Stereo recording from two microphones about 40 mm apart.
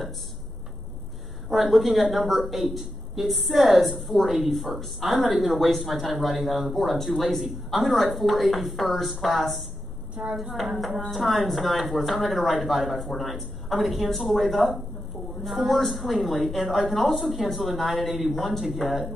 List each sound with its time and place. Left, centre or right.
1.5 s a woman's voice: centre
10.2 s speech: right
10.5 s a woman's voice: centre